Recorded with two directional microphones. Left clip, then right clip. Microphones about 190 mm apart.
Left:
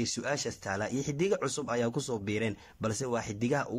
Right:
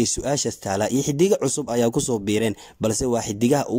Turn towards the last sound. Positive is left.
turn(degrees=-30)  # may be behind; listen again after turning